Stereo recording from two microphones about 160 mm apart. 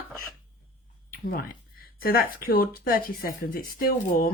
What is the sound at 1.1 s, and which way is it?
Speech, 65° left (ahead or behind).